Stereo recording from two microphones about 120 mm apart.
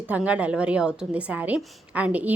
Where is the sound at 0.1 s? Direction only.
10° right (ahead or behind).